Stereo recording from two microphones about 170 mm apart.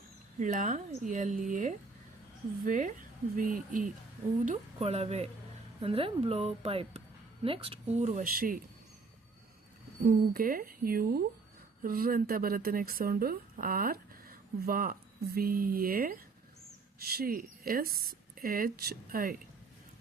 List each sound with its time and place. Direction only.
0.3 s speech: 45° right (ahead or behind)
4.4 s speech: 35° right (ahead or behind); by 8.6 s 55° right (ahead or behind)
10.1 s speech: 55° right (ahead or behind)